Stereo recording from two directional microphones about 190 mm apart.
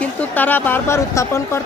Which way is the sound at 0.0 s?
10° left (ahead or behind).